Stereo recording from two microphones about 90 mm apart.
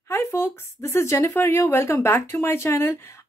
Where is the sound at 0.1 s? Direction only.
30° left (ahead or behind).